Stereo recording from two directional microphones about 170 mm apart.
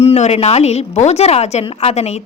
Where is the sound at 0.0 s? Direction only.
40° left (ahead or behind).